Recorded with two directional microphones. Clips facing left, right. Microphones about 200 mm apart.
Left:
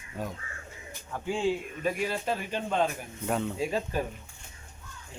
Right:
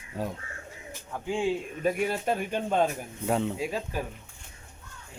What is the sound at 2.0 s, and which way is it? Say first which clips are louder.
Speech: right 3 dB; 55° right (ahead or behind).